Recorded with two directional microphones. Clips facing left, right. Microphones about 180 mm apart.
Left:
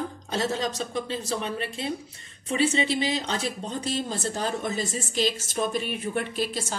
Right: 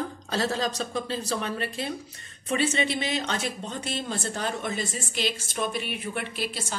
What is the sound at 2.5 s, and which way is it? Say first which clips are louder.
Speech: left 2 dB; 25° left (ahead or behind).